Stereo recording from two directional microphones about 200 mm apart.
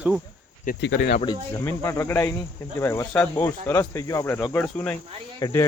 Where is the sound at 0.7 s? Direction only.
60° left (ahead or behind).